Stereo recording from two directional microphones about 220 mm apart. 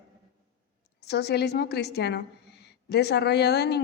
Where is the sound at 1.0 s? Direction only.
50° left (ahead or behind).